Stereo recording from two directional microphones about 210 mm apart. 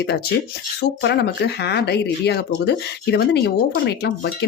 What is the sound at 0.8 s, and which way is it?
Speech, 50° left (ahead or behind).